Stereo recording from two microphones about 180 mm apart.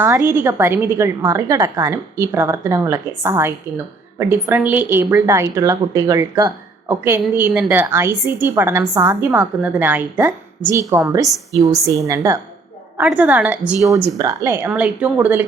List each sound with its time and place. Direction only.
0.3 s a woman's voice: 10° right (ahead or behind)
13.0 s a woman's voice: 5° right (ahead or behind)